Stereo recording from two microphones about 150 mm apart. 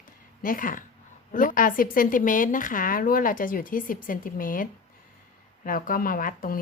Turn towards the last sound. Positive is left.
turn(degrees=65)  # may be behind; listen again after turning